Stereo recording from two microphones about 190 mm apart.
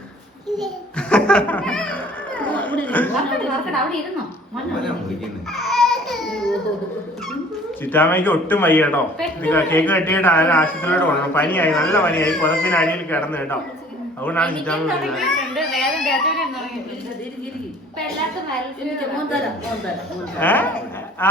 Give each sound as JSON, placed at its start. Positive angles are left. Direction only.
{"t": 0.9, "sound": "speech", "side_deg": 5}
{"t": 5.5, "sound": "baby cry", "side_deg": 0}
{"t": 7.9, "sound": "a man's voice", "side_deg": 10}
{"t": 20.4, "sound": "a man's voice", "side_deg": 10}